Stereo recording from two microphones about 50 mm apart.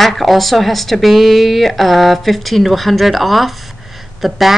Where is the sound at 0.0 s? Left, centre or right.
Centre.